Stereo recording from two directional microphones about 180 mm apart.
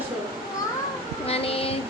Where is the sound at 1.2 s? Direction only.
35° left (ahead or behind).